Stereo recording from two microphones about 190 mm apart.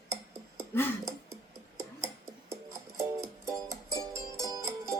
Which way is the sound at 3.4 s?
15° right (ahead or behind).